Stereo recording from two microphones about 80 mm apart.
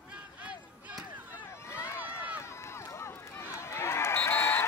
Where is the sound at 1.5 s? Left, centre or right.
Left.